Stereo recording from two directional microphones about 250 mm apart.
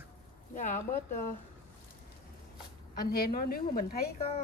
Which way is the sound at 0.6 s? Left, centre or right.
Left.